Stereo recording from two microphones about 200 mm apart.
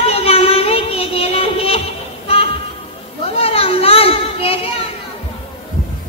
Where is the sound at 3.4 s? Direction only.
30° left (ahead or behind).